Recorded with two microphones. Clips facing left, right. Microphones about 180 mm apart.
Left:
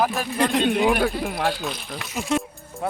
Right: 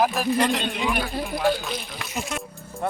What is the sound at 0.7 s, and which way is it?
Speech, 55° left (ahead or behind).